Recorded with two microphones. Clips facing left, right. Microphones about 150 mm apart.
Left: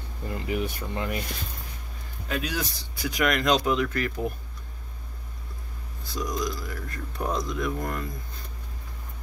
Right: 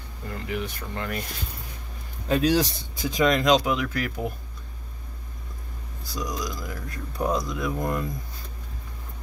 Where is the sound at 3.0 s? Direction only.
20° right (ahead or behind).